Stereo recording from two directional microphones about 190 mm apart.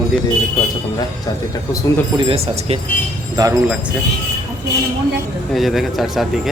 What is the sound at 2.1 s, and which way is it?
Speech, 30° right (ahead or behind).